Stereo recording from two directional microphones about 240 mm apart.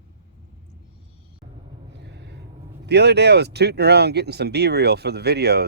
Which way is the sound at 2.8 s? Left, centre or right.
Right.